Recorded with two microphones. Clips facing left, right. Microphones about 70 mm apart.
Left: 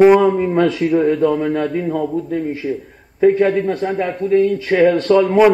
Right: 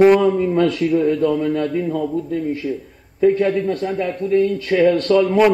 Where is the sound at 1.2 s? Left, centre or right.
Left.